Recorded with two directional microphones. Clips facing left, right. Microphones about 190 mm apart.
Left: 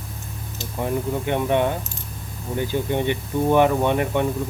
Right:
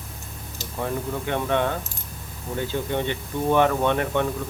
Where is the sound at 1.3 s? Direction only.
15° left (ahead or behind).